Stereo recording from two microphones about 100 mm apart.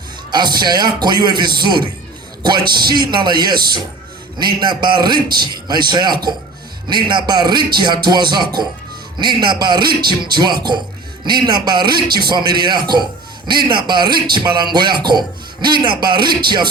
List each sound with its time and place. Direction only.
0.3 s a man's voice: 45° right (ahead or behind)